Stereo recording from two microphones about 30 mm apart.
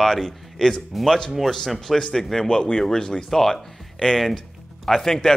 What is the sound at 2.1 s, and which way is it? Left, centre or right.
Speech, centre.